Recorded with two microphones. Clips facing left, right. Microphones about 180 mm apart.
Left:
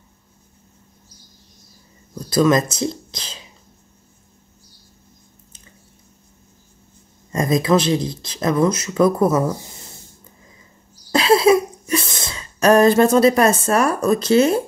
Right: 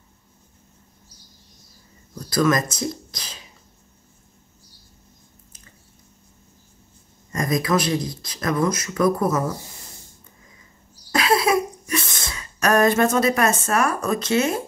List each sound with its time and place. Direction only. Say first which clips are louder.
2.1 s speech: left 4 dB; 25° left (ahead or behind)
7.3 s speech: left 5 dB; 25° left (ahead or behind)
11.1 s cough: left 6 dB; 30° left (ahead or behind)